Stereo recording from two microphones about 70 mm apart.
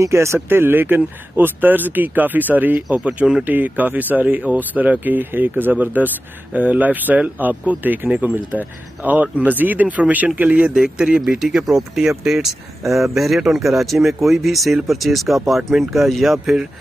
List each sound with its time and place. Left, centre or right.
0.0 s speech: right; by 3.4 s centre
3.4 s speech: right
10.7 s speech: centre